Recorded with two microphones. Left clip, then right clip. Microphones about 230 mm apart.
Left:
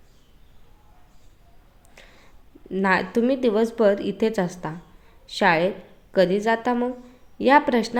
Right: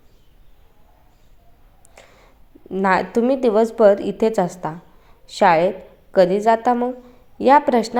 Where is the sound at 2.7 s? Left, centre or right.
Centre.